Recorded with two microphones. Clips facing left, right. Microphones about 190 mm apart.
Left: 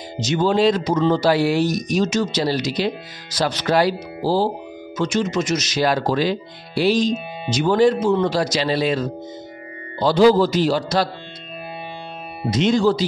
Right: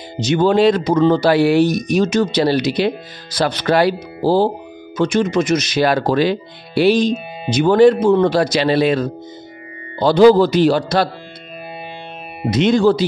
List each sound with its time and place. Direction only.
0.2 s speech: 60° right (ahead or behind)
12.4 s speech: 60° right (ahead or behind)